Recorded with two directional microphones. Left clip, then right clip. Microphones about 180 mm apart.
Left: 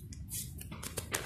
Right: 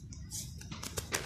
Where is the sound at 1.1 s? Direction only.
15° right (ahead or behind).